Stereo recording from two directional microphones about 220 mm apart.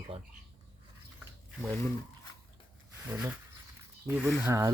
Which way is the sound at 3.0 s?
5° right (ahead or behind).